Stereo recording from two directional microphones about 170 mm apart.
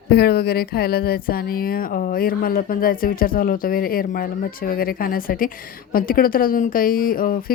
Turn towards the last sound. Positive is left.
turn(degrees=55)  # may be behind; listen again after turning